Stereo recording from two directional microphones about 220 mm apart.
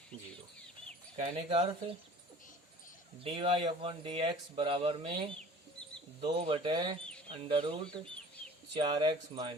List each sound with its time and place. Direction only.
1.1 s speech: 25° right (ahead or behind)
3.2 s speech: 25° right (ahead or behind)
6.2 s speech: 25° right (ahead or behind)